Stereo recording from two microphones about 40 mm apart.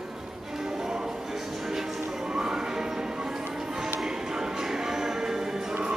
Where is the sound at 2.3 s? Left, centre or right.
Centre.